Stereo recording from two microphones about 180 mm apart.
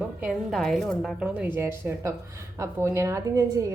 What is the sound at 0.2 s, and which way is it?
A woman's voice, centre (ahead or behind).